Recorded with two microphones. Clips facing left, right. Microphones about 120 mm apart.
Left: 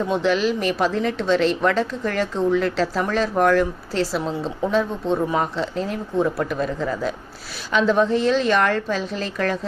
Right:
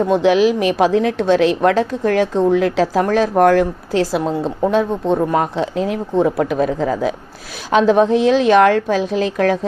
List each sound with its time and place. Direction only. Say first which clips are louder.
0.0 s speech: right 7 dB; 55° right (ahead or behind)
2.8 s speech: right 6 dB; 50° right (ahead or behind); by 9.0 s 70° right (ahead or behind)
9.0 s speech: right 8 dB; 60° right (ahead or behind)